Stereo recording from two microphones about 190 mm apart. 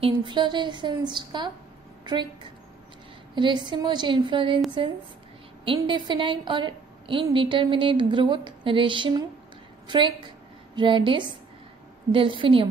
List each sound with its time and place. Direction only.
0.0 s speech: 25° right (ahead or behind)
3.3 s speech: 25° right (ahead or behind)
5.8 s speech: 25° right (ahead or behind)